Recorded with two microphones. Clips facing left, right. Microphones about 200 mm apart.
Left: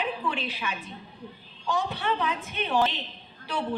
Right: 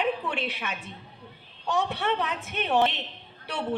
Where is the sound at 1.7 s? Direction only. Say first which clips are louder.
Right 2 dB; 70° right (ahead or behind).